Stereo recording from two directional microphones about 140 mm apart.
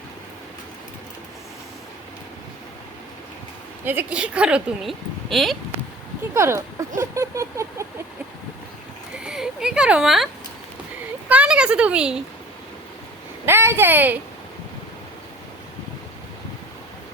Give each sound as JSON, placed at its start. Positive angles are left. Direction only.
{"t": 3.8, "sound": "speech", "side_deg": -10}
{"t": 6.3, "sound": "speech", "side_deg": -20}
{"t": 7.0, "sound": "vehicle", "side_deg": -20}
{"t": 9.1, "sound": "a sound", "side_deg": -5}
{"t": 11.3, "sound": "speech", "side_deg": -10}
{"t": 13.4, "sound": "speech", "side_deg": -15}